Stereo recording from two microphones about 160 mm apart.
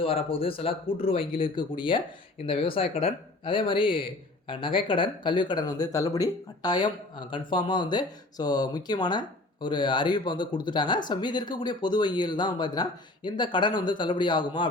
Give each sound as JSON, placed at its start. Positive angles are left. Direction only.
{"t": 0.0, "sound": "speech", "side_deg": 35}